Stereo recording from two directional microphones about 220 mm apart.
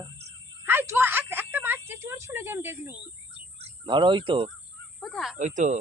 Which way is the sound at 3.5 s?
25° right (ahead or behind).